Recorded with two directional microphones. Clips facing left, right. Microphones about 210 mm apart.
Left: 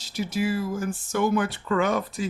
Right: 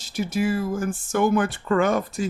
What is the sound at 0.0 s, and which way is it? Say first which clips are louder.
Speech: right 2 dB; 50° right (ahead or behind).